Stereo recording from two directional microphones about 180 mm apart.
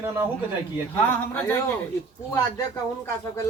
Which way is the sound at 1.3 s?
15° left (ahead or behind).